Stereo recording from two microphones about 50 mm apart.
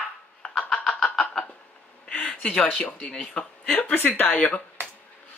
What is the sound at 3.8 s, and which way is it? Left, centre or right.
Speech, left.